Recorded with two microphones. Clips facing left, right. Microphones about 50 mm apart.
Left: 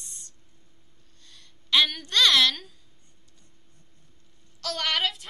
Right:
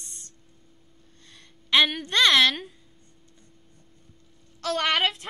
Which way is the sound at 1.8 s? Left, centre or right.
Right.